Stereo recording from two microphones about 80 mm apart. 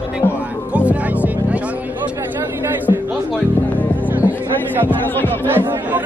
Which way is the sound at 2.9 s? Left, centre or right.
Left.